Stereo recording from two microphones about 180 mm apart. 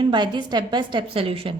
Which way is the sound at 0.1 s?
25° right (ahead or behind).